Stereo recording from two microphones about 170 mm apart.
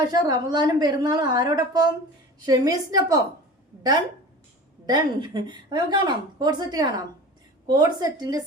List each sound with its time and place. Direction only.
0.0 s a woman's voice: 25° right (ahead or behind)
4.9 s a woman's voice: 25° right (ahead or behind)